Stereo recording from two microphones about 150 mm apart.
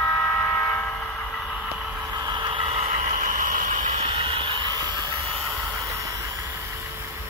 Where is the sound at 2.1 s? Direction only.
30° right (ahead or behind); by 4.0 s 55° right (ahead or behind).